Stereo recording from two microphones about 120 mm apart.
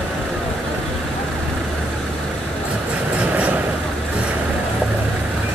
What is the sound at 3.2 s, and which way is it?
Vehicle, 10° right (ahead or behind).